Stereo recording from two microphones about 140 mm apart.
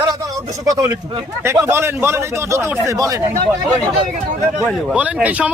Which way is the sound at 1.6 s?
20° right (ahead or behind).